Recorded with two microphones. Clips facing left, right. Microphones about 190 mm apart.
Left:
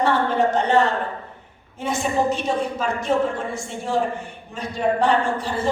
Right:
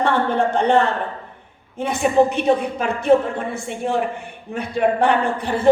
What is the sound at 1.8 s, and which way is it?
A man's voice, 60° right (ahead or behind).